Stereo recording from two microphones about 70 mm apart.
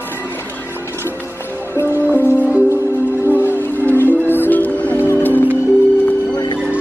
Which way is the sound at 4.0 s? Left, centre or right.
Left.